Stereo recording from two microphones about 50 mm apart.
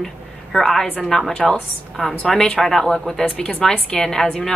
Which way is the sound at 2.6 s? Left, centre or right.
Centre.